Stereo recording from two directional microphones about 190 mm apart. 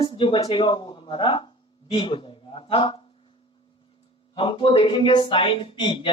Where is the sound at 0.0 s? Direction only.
25° left (ahead or behind).